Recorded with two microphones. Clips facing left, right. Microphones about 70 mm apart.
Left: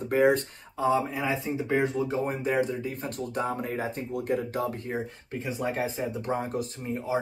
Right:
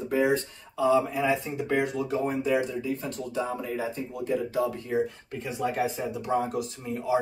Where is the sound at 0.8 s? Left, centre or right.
Left.